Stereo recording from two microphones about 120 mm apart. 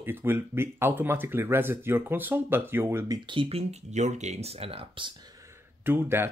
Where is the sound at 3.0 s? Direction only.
35° right (ahead or behind).